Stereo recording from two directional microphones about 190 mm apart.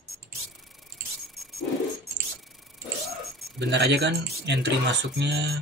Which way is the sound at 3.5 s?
60° right (ahead or behind).